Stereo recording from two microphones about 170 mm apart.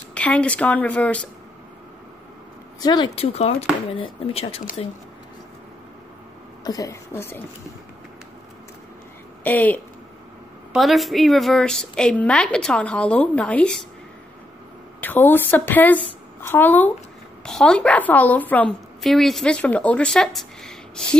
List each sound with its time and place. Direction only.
0.1 s a woman's voice: 10° left (ahead or behind)
2.8 s speech: 25° left (ahead or behind)
6.6 s a woman's voice: 20° left (ahead or behind)
9.4 s speech: 10° left (ahead or behind)
10.7 s a woman's voice: centre (ahead or behind)
15.0 s a woman's voice: 10° left (ahead or behind)